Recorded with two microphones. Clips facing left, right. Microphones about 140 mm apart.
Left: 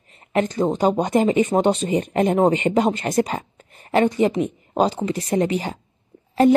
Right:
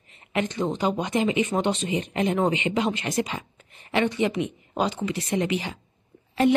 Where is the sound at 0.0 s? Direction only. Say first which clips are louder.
Left 6 dB; 40° left (ahead or behind).